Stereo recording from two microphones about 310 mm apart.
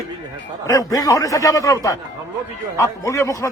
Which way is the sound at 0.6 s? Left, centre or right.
Centre.